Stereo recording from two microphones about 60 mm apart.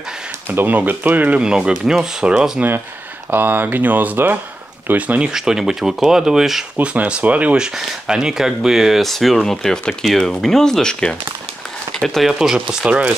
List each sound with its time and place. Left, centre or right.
0.5 s speech: right
1.4 s speech: centre
3.3 s speech: right
5.3 s speech: centre
6.8 s speech: centre
7.5 s speech: centre
12.2 s speech: centre